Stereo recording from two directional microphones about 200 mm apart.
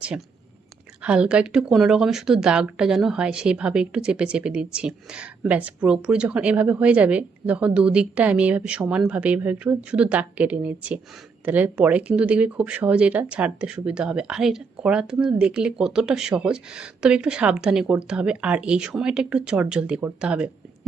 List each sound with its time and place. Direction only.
1.0 s speech: 5° right (ahead or behind)